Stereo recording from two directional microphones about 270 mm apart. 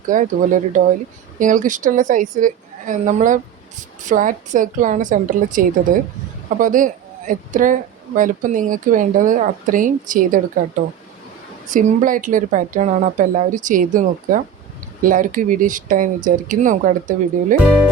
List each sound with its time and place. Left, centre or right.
0.1 s speech: right
11.7 s speech: right